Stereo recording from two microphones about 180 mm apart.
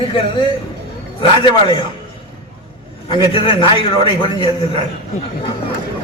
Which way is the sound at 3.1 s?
30° left (ahead or behind).